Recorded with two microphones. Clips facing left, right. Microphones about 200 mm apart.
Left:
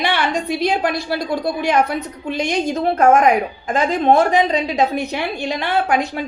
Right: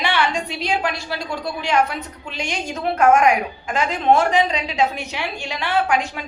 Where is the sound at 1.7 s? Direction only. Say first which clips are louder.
Left 1 dB; 40° left (ahead or behind).